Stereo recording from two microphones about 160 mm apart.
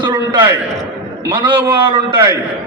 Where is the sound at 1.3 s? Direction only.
30° right (ahead or behind).